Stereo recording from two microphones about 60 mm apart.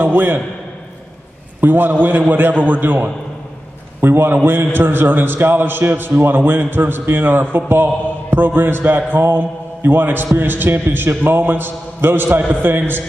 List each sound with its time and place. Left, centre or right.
0.0 s a man's voice: right
1.6 s a man's voice: right